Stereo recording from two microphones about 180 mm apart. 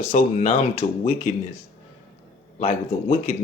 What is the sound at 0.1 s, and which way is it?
Speech, 40° left (ahead or behind).